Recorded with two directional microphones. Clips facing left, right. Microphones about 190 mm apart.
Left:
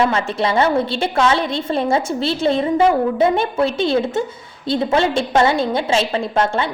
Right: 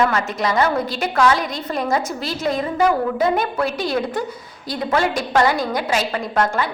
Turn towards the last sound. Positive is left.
turn(degrees=25)  # may be behind; listen again after turning